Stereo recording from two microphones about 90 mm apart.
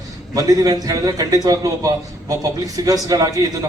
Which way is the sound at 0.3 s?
40° right (ahead or behind).